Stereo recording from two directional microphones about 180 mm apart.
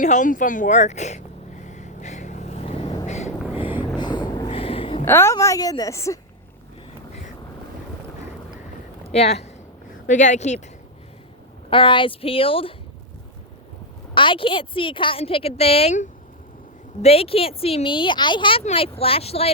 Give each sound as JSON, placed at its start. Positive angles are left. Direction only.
{"t": 0.0, "sound": "a sound", "side_deg": 45}
{"t": 3.9, "sound": "vehicle", "side_deg": 25}
{"t": 4.4, "sound": "a sound", "side_deg": 35}
{"t": 5.0, "sound": "a woman's voice", "side_deg": 15}
{"t": 9.1, "sound": "speech", "side_deg": 35}
{"t": 11.7, "sound": "speech", "side_deg": 30}
{"t": 14.1, "sound": "a woman's voice", "side_deg": 30}